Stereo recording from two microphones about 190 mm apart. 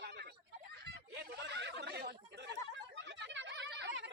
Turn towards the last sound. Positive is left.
turn(degrees=-65)  # may be behind; listen again after turning